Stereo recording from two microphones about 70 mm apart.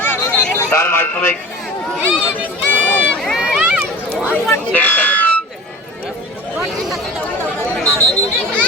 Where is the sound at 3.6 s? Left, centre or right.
Centre.